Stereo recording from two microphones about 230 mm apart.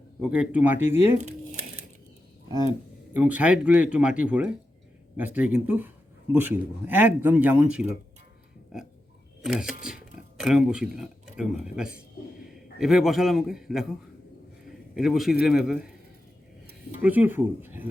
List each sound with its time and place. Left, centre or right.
0.2 s speech: centre
3.1 s speech: centre
14.9 s speech: centre
17.0 s speech: centre